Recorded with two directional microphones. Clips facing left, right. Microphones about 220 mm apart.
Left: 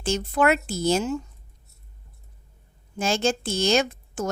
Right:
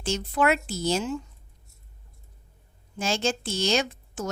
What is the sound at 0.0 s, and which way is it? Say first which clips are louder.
A woman's voice: left 3 dB; 50° left (ahead or behind).